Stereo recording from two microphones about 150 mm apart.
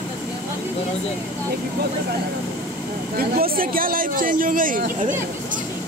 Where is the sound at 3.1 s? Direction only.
80° right.